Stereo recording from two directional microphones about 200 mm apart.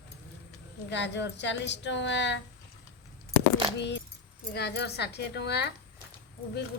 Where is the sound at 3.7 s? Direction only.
60° left (ahead or behind).